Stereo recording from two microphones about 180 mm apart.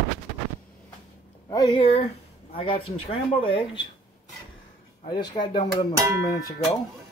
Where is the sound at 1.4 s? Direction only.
25° left (ahead or behind).